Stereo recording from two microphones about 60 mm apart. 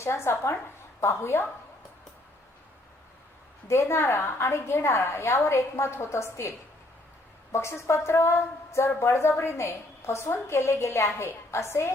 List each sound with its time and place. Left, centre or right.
0.0 s a woman's voice: left
3.7 s a woman's voice: left
7.5 s a woman's voice: left